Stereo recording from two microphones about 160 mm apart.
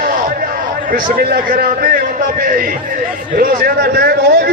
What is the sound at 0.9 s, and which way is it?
A man's voice, 70° right (ahead or behind).